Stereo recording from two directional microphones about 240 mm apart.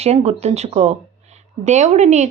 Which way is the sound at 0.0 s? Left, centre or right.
Right.